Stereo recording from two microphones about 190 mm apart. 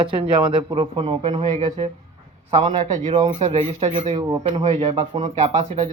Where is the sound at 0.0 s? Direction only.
25° right (ahead or behind).